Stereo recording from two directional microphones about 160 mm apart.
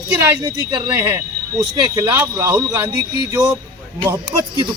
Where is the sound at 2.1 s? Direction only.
15° right (ahead or behind).